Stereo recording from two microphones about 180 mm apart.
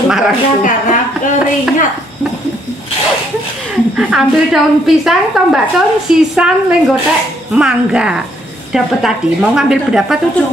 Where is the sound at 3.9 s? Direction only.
Centre (ahead or behind).